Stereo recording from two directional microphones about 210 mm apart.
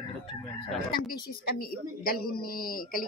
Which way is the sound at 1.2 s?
45° left (ahead or behind).